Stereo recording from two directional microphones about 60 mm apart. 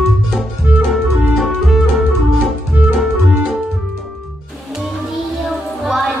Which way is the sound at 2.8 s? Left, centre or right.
Right.